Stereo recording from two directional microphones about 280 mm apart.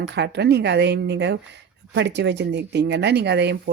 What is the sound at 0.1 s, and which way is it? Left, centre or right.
Speech, right.